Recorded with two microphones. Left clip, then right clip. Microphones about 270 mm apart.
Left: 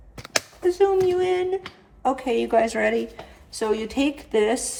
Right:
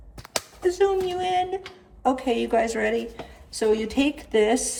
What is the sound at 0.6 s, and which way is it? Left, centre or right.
A woman's voice, centre.